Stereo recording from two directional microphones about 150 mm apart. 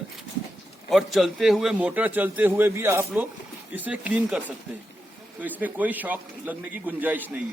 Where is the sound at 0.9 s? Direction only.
Centre (ahead or behind).